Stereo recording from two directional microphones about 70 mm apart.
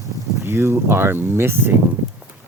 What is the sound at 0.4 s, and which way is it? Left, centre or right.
Speech, right.